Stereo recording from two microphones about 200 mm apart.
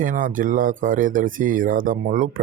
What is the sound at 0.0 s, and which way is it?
Speech, 40° right (ahead or behind).